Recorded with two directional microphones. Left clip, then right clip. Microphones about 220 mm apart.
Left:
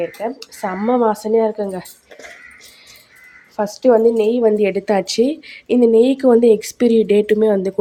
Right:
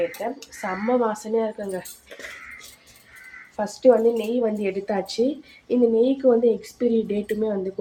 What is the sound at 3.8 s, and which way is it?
Speech, 45° left (ahead or behind).